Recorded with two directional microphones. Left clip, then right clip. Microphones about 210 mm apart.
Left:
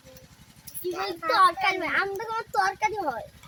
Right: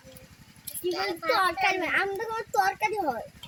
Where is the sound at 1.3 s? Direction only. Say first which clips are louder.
Left 4 dB; 40° right (ahead or behind).